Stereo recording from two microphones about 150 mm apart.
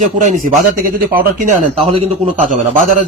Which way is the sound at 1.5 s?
55° right (ahead or behind).